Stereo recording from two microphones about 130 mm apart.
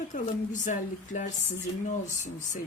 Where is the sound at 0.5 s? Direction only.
75° left (ahead or behind).